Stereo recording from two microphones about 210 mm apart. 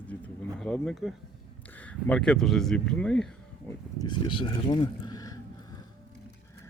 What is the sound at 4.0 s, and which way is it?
Speech, 20° left (ahead or behind).